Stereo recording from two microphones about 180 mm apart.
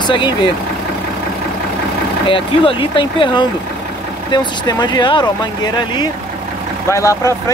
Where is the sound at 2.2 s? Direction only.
30° left (ahead or behind).